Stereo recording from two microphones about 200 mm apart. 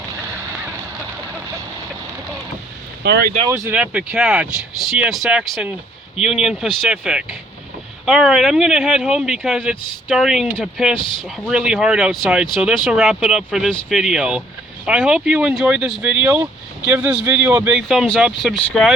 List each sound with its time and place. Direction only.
3.0 s speech: 55° right (ahead or behind)
3.5 s speech: 10° right (ahead or behind)